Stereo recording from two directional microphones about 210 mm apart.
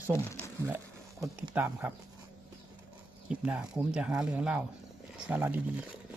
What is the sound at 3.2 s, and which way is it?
Speech, 5° right (ahead or behind).